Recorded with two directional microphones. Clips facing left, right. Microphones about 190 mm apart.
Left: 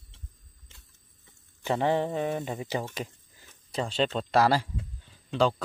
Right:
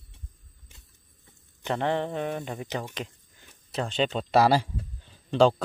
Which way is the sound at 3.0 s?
Centre (ahead or behind).